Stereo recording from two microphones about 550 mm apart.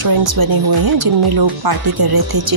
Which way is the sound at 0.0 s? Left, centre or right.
Right.